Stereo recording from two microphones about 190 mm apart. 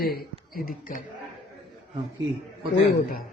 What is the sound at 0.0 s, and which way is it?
Speech, 50° left (ahead or behind).